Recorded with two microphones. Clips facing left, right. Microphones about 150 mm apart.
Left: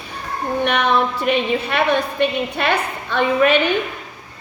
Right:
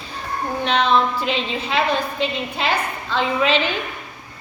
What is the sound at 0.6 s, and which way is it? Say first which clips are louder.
A woman's voice: even; 65° left (ahead or behind).